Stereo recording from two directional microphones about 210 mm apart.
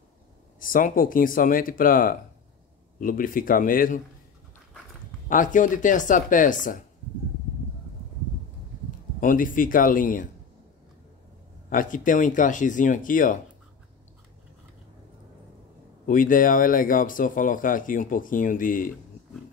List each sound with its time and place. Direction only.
0.6 s speech: 40° left (ahead or behind)
5.3 s speech: 40° left (ahead or behind)
9.2 s speech: 40° left (ahead or behind)
11.7 s speech: 40° left (ahead or behind)
16.1 s speech: 40° left (ahead or behind)